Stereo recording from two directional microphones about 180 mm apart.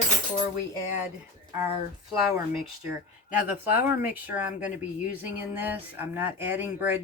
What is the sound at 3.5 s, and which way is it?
Speech, 10° right (ahead or behind).